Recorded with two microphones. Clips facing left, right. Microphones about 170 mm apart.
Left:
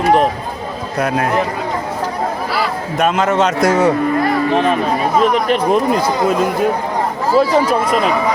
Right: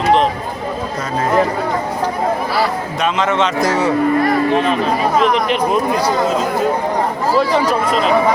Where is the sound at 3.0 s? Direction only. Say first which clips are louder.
Left 3 dB; 45° left (ahead or behind).